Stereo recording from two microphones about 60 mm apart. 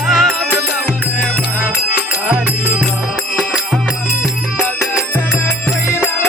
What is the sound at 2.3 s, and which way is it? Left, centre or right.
Music, right.